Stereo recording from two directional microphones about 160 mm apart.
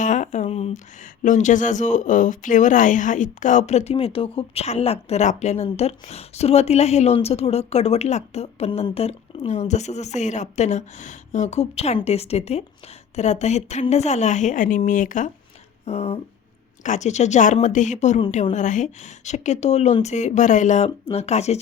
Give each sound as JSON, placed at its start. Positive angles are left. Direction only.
{"t": 0.0, "sound": "speech", "side_deg": 50}
{"t": 1.2, "sound": "a woman's voice", "side_deg": 50}
{"t": 15.9, "sound": "a woman's voice", "side_deg": 40}